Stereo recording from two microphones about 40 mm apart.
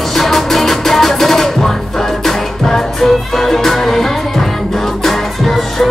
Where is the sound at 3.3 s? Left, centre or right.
Centre.